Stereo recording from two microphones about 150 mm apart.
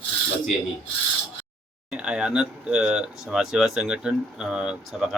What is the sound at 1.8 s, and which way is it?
Speech, 5° right (ahead or behind).